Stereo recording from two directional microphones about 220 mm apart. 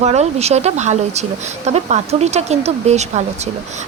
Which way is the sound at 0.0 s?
30° right (ahead or behind).